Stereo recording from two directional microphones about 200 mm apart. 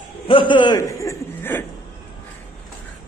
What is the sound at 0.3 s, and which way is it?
A man's voice, 25° left (ahead or behind).